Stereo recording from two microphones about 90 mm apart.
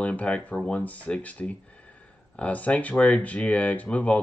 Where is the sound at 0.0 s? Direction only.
15° left (ahead or behind).